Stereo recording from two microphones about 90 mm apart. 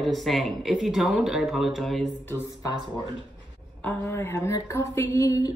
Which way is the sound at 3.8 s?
20° left (ahead or behind).